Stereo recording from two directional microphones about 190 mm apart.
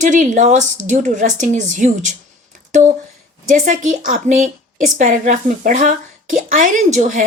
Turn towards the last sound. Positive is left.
turn(degrees=-40)  # may be behind; listen again after turning